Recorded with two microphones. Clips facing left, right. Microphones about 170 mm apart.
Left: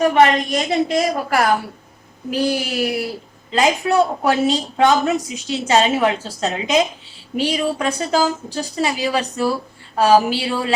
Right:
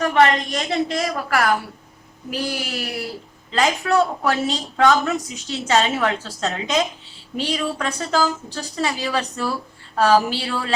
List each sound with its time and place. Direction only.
0.0 s a woman's voice: 15° left (ahead or behind)